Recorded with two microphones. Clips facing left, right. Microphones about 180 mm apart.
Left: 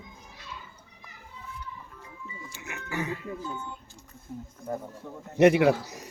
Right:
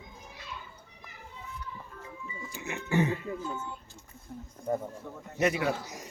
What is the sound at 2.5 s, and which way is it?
Music, 30° right (ahead or behind).